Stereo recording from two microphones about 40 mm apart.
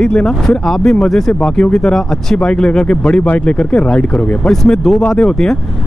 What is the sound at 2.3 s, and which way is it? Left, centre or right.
Speech, left.